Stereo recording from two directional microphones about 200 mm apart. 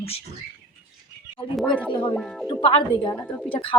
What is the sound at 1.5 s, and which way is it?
Speech, 5° left (ahead or behind).